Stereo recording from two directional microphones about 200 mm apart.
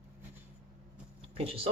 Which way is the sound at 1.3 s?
30° right (ahead or behind).